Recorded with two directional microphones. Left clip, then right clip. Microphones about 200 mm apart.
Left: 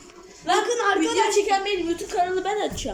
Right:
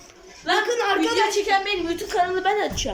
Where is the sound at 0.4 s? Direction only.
Centre (ahead or behind).